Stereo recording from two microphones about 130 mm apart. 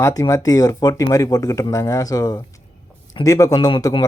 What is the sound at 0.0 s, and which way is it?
Speech, 25° left (ahead or behind).